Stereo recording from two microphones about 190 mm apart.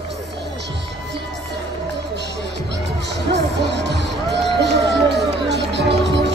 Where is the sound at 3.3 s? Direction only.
65° right (ahead or behind).